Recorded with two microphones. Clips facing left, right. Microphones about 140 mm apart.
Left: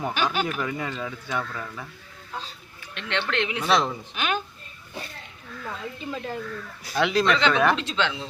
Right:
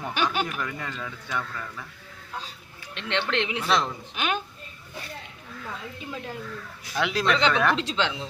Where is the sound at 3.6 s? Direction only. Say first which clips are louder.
Left 2 dB; 5° left (ahead or behind).